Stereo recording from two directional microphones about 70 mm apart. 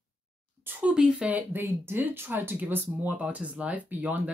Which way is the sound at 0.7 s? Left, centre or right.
Right.